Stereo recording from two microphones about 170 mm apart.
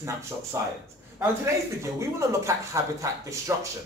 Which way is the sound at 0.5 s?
15° right (ahead or behind).